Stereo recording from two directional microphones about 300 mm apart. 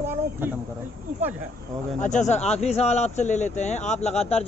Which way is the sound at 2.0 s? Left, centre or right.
Left.